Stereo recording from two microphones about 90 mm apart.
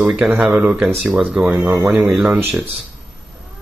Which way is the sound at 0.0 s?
15° right (ahead or behind).